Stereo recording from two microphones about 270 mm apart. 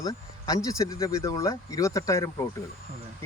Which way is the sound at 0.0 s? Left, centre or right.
Centre.